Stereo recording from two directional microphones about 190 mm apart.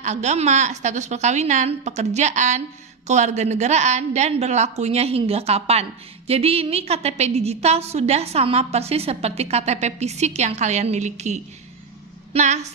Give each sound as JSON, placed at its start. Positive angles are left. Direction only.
{"t": 0.0, "sound": "a woman's voice", "side_deg": -35}